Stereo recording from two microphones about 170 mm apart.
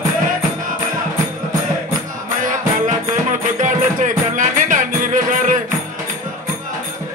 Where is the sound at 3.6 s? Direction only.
50° right (ahead or behind).